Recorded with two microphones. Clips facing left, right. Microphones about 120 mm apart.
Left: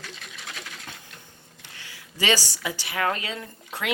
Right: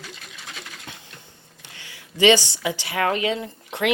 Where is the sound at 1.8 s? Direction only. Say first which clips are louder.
Right 11 dB; 25° right (ahead or behind).